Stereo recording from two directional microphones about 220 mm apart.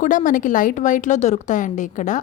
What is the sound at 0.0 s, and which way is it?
A woman's voice, 35° left (ahead or behind).